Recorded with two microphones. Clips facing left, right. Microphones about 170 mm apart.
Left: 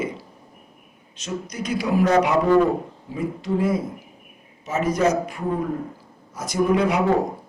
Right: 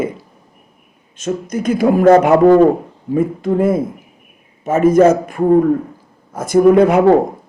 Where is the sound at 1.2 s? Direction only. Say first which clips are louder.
Right 9 dB; 50° right (ahead or behind).